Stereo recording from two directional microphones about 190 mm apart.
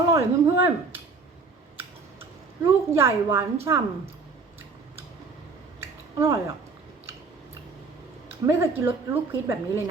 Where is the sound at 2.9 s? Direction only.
15° right (ahead or behind).